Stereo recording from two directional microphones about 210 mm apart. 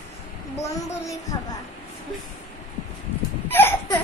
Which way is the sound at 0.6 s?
15° left (ahead or behind).